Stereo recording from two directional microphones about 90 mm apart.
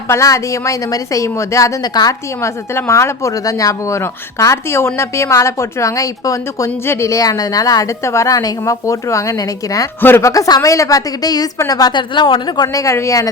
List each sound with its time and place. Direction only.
0.1 s speech: 35° left (ahead or behind)
2.4 s speech: 30° left (ahead or behind); by 12.6 s 55° left (ahead or behind)
12.6 s speech: 35° left (ahead or behind)